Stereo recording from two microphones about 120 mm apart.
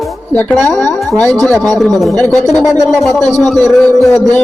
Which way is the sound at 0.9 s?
Centre (ahead or behind).